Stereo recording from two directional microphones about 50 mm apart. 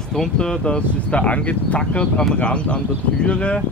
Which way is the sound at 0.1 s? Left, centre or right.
Centre.